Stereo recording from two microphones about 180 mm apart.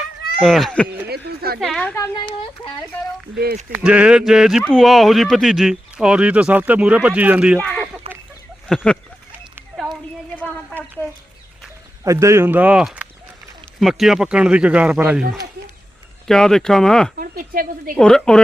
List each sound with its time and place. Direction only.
0.4 s speech: centre (ahead or behind)
1.0 s a sound: 60° right (ahead or behind)
1.5 s speech: centre (ahead or behind)
2.0 s speech: 25° left (ahead or behind)
3.3 s speech: 60° right (ahead or behind)
3.7 s speech: 5° right (ahead or behind)
7.6 s a sound: 10° left (ahead or behind)
8.1 s chicken: 35° right (ahead or behind)
8.6 s a sound: 5° left (ahead or behind)
10.3 s a sound: 5° left (ahead or behind)
12.0 s speech: 15° right (ahead or behind); by 17.1 s 5° left (ahead or behind)
17.2 s a woman's voice: 55° right (ahead or behind)
17.9 s speech: 5° left (ahead or behind)